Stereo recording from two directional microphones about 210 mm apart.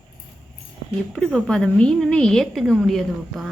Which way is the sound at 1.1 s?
Centre (ahead or behind).